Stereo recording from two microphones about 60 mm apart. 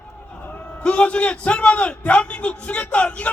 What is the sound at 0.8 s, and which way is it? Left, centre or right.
A man's voice, left.